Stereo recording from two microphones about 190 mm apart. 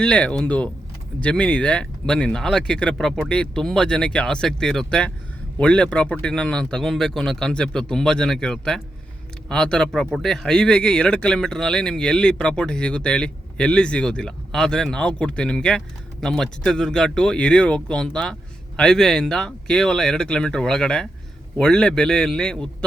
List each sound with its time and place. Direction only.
0.0 s speech: 5° left (ahead or behind)